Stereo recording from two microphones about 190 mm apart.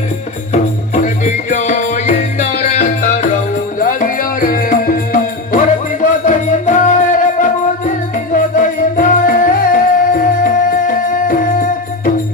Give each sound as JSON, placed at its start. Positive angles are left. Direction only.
{"t": 0.5, "sound": "music", "side_deg": 35}